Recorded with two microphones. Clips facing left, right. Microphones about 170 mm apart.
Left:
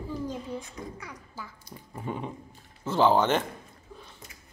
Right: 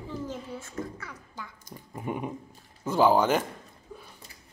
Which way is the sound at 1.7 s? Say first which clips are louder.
Right 1 dB; 45° right (ahead or behind).